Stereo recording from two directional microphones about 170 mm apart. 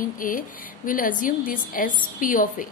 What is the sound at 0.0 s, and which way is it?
A woman's voice, 55° left (ahead or behind).